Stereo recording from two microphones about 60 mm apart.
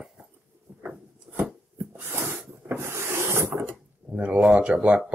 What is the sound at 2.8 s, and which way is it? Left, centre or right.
Rub, right.